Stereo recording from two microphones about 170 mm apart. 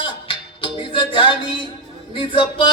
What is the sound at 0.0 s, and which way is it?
Music, 30° left (ahead or behind).